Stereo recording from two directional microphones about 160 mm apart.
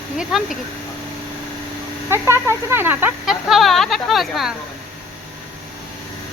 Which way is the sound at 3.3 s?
Centre (ahead or behind).